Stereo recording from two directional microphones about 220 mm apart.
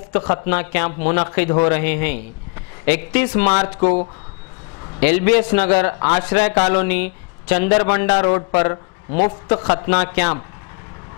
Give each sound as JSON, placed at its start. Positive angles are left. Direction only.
{"t": 0.3, "sound": "a man's voice", "side_deg": 10}
{"t": 3.8, "sound": "speech", "side_deg": 35}
{"t": 5.0, "sound": "a man's voice", "side_deg": 10}